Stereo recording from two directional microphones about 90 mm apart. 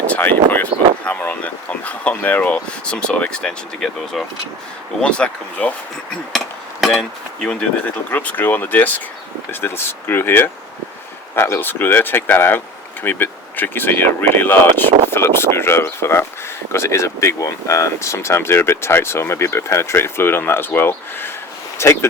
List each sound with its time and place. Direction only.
0.1 s speech: 20° left (ahead or behind)
6.8 s speech: centre (ahead or behind)
8.1 s speech: 20° left (ahead or behind)